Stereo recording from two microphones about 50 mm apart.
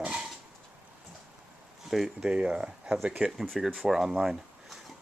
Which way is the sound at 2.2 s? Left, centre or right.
Right.